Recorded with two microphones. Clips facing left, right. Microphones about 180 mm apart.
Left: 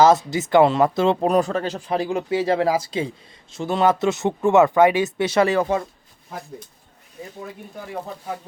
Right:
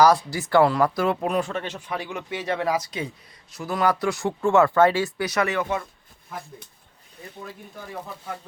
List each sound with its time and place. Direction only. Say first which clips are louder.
0.0 s speech: left 3 dB; 20° left (ahead or behind)